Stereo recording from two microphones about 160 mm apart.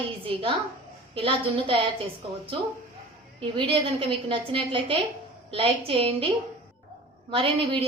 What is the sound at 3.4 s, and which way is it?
A woman's voice, 30° right (ahead or behind).